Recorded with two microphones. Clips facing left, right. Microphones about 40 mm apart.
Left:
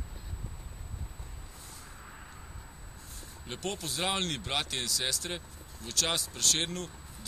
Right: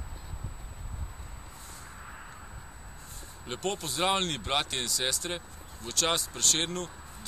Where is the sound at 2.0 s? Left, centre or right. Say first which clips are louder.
Right 5 dB; centre.